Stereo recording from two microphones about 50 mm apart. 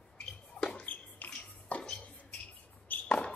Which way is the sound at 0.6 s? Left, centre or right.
Left.